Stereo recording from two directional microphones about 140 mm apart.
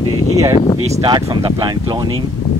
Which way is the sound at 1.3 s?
30° right (ahead or behind).